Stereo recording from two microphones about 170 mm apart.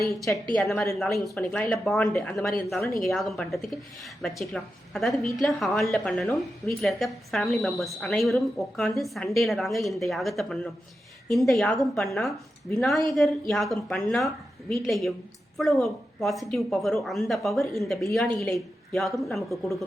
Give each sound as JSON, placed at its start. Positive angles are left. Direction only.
{"t": 0.5, "sound": "a woman's voice", "side_deg": 5}
{"t": 13.5, "sound": "a woman's voice", "side_deg": 0}